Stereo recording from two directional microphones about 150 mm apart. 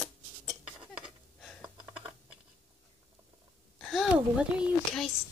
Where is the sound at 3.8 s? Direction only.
Centre (ahead or behind).